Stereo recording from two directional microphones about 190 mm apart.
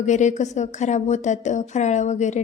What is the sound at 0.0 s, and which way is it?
A woman's voice, 40° left (ahead or behind).